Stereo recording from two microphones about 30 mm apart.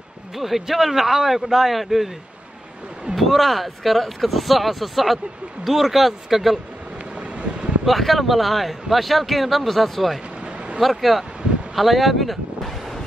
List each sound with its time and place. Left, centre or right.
0.4 s speech: centre
3.2 s speech: centre
7.2 s vehicle: right
7.8 s speech: centre
10.4 s a sound: right
10.8 s speech: centre
11.7 s a sound: centre